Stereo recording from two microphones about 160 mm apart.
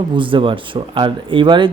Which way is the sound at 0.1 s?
30° right (ahead or behind).